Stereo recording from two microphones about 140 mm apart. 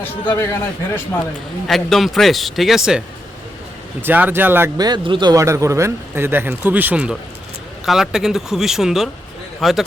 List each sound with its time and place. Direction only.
0.0 s a man's voice: 15° left (ahead or behind)
1.6 s a man's voice: centre (ahead or behind)
4.0 s speech: 15° right (ahead or behind)
4.8 s a man's voice: 35° right (ahead or behind); by 9.8 s centre (ahead or behind)